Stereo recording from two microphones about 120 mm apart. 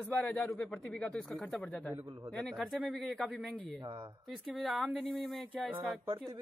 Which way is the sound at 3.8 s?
35° right (ahead or behind).